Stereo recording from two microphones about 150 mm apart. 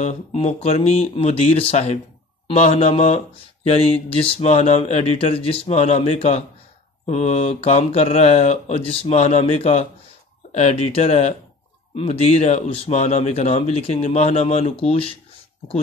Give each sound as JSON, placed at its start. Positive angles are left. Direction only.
{"t": 0.0, "sound": "speech", "side_deg": 45}